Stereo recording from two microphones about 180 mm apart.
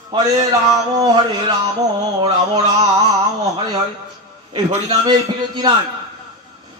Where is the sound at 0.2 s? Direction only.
20° right (ahead or behind).